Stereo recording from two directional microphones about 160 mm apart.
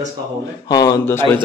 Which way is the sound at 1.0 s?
15° left (ahead or behind).